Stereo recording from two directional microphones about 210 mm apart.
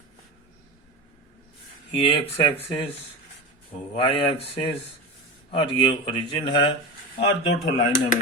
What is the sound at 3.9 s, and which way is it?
A man's voice, 25° left (ahead or behind).